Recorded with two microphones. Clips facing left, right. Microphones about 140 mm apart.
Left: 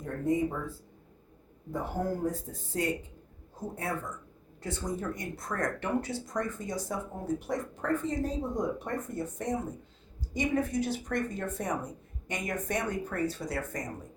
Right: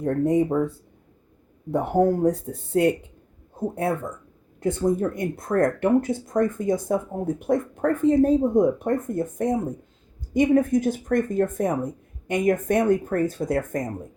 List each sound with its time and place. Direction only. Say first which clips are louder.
0.0 s speech: right 8 dB; 70° right (ahead or behind); by 13.8 s 50° right (ahead or behind)